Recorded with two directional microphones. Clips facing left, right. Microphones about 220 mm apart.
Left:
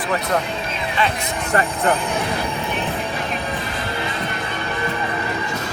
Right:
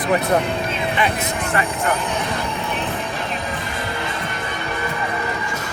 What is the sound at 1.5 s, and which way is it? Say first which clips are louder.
Speech: left 3 dB; 40° left (ahead or behind).